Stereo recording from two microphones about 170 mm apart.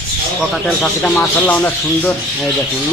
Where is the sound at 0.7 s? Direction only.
5° left (ahead or behind).